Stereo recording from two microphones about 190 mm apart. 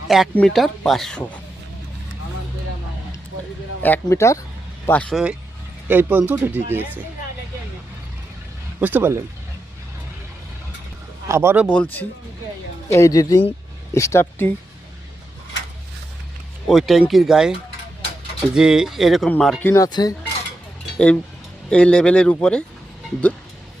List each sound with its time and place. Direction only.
0.1 s speech: centre (ahead or behind)
3.8 s speech: 10° left (ahead or behind); by 7.0 s 10° right (ahead or behind)
8.8 s speech: 10° right (ahead or behind)
11.3 s speech: 15° right (ahead or behind)
11.7 s speech: 10° left (ahead or behind)
16.6 s speech: centre (ahead or behind)
18.5 s speech: 5° right (ahead or behind); by 20.1 s 20° left (ahead or behind)
21.7 s speech: 5° left (ahead or behind)